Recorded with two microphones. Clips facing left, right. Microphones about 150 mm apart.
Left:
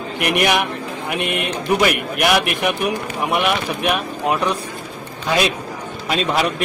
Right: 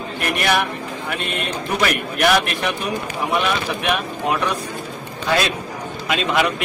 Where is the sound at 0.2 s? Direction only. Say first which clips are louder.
Left 2 dB; 15° left (ahead or behind).